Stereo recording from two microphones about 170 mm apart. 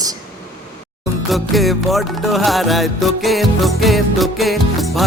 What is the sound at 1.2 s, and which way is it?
Music, centre (ahead or behind).